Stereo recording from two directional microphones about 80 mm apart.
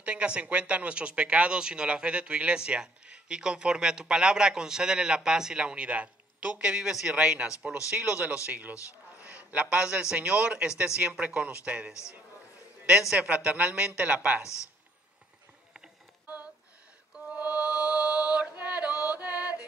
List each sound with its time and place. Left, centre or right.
0.0 s a man's voice: centre
11.9 s a man's voice: left
13.2 s speech: centre
14.4 s a man's voice: left
17.1 s mantra: centre
18.6 s music: centre